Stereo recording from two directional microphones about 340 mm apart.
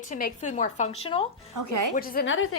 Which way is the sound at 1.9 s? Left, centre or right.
Left.